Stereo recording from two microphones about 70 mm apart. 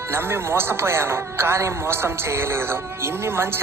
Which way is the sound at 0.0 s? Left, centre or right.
Right.